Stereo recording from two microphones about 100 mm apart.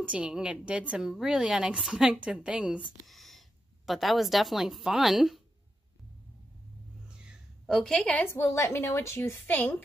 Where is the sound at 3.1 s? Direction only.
Centre (ahead or behind).